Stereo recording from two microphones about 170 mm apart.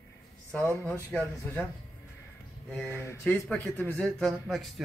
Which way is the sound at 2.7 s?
10° left (ahead or behind).